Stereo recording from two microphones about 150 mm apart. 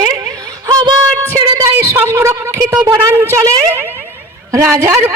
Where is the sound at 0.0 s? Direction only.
25° right (ahead or behind).